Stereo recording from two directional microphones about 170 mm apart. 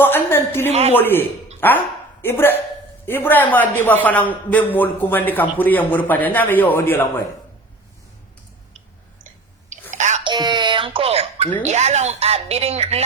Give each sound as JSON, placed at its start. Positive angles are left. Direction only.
{"t": 0.0, "sound": "a man's voice", "side_deg": 15}
{"t": 0.7, "sound": "a woman's voice", "side_deg": -40}
{"t": 0.9, "sound": "a man's voice", "side_deg": 10}
{"t": 9.9, "sound": "a sound", "side_deg": -45}
{"t": 10.2, "sound": "a sound", "side_deg": -25}
{"t": 11.6, "sound": "a woman's voice", "side_deg": -40}